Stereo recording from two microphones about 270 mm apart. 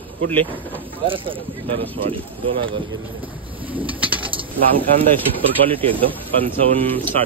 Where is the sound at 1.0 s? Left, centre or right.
Centre.